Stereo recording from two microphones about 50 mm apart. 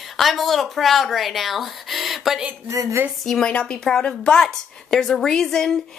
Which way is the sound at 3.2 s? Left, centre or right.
Centre.